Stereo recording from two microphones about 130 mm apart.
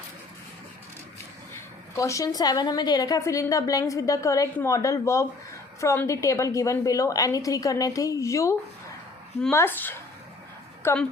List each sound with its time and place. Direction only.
2.0 s a woman's voice: 25° left (ahead or behind)